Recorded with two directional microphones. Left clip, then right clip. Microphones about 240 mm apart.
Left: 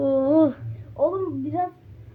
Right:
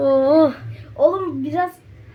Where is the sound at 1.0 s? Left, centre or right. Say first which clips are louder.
Right 7 dB; right.